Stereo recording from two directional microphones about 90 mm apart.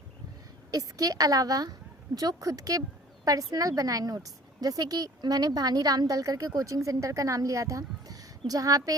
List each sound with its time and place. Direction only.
0.7 s a woman's voice: 40° right (ahead or behind)